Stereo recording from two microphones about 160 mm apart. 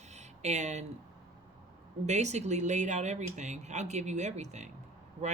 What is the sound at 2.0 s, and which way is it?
Speech, 45° right (ahead or behind).